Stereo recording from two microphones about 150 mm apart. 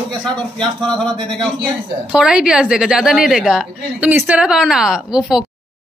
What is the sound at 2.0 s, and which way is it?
A woman's voice, 5° right (ahead or behind).